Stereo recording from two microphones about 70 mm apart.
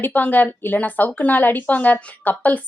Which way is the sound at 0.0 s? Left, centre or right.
Left.